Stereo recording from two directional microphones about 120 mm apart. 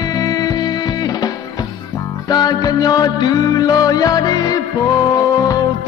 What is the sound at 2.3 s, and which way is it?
Music, 35° left (ahead or behind).